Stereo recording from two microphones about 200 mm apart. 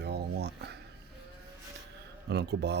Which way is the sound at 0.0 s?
55° right (ahead or behind).